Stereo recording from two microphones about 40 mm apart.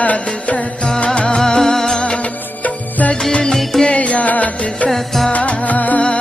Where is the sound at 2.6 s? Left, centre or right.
Left.